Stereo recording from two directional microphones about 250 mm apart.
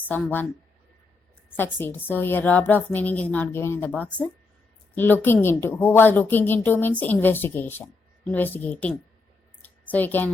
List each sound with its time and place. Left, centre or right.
0.1 s a woman's voice: centre
1.5 s a woman's voice: centre
9.6 s a sound: centre